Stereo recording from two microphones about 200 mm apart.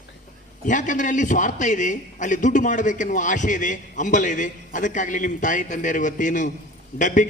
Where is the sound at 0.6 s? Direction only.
40° left (ahead or behind).